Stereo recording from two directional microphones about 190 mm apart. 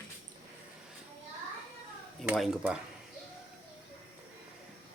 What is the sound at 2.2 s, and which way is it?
Speech, centre (ahead or behind).